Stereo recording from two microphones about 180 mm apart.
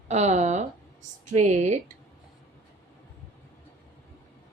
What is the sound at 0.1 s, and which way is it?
A woman's voice, 40° right (ahead or behind).